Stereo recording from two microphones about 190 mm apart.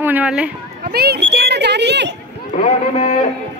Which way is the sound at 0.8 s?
55° right (ahead or behind).